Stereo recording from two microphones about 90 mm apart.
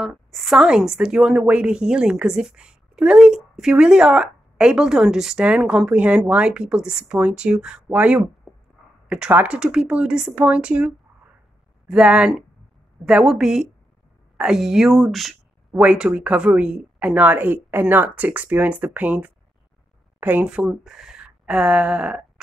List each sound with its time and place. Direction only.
0.0 s a woman's voice: centre (ahead or behind)
11.9 s a woman's voice: 10° right (ahead or behind)
15.7 s a woman's voice: 15° right (ahead or behind)